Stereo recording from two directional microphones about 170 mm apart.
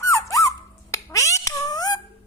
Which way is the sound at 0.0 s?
20° left (ahead or behind).